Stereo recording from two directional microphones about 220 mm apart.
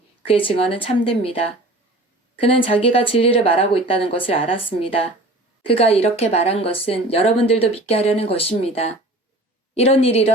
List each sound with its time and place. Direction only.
0.3 s speech: 25° left (ahead or behind)